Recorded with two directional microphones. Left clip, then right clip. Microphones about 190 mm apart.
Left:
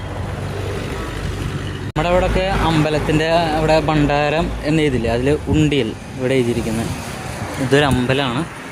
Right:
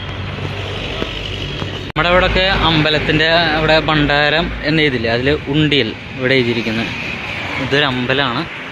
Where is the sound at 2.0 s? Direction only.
15° left (ahead or behind).